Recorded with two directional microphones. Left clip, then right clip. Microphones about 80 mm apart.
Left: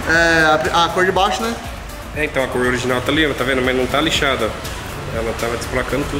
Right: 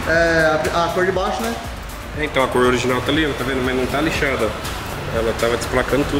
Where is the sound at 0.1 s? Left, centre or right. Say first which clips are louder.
Left 2 dB; centre.